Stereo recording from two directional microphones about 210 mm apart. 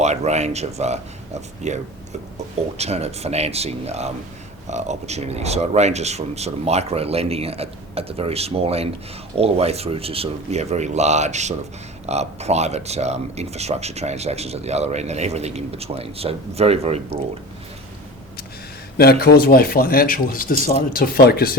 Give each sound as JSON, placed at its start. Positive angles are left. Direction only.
{"t": 0.0, "sound": "speech", "side_deg": -30}
{"t": 18.9, "sound": "speech", "side_deg": 45}